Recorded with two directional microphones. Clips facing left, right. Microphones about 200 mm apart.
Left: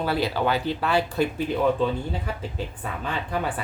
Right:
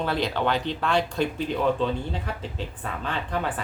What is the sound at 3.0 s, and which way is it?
Speech, 10° left (ahead or behind).